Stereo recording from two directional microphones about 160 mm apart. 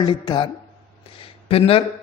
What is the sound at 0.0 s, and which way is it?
Speech, 30° left (ahead or behind).